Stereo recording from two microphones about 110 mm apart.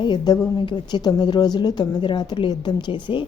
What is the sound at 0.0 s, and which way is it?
A woman's voice, 45° left (ahead or behind).